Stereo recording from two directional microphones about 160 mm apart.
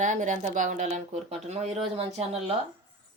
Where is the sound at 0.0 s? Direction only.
50° right (ahead or behind).